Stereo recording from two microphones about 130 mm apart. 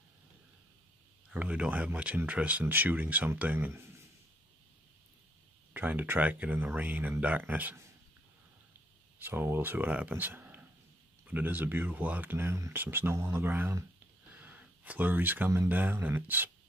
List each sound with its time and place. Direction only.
1.3 s speech: 10° right (ahead or behind)
5.7 s speech: 15° right (ahead or behind)
9.2 s speech: 15° right (ahead or behind)